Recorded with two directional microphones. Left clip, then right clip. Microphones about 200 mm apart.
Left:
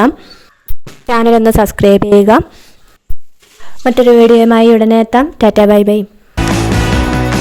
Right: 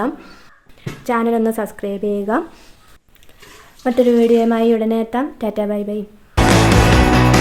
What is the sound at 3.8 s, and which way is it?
A woman's voice, 50° left (ahead or behind).